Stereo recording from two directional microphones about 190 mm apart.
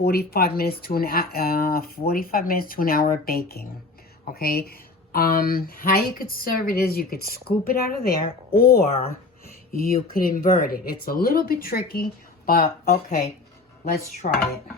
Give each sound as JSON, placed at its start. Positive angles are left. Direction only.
{"t": 0.0, "sound": "speech", "side_deg": 55}